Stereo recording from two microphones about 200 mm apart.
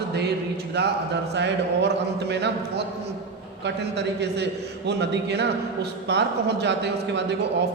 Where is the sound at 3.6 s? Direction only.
60° right (ahead or behind).